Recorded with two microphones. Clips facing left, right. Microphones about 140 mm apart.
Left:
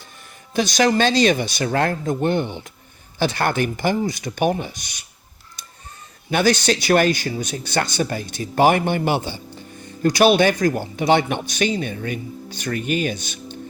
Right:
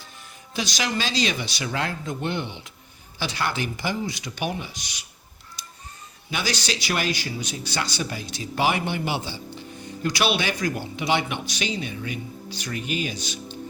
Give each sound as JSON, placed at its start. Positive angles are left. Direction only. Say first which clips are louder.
{"t": 0.5, "sound": "speech", "louder": "left 10 dB", "side_deg": 50}
{"t": 6.3, "sound": "speech", "louder": "left 10 dB", "side_deg": 50}